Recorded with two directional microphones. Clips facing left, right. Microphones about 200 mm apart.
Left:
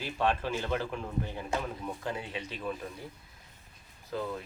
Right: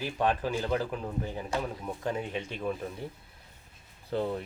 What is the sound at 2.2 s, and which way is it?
Speech, 50° right (ahead or behind).